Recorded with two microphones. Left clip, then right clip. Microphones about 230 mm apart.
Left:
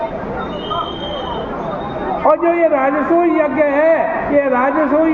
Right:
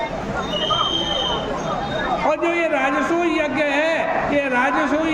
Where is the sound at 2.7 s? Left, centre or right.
Right.